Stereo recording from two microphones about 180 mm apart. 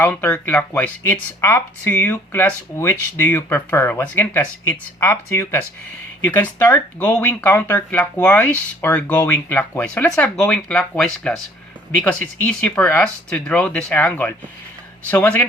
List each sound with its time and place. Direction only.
0.0 s speech: 10° left (ahead or behind)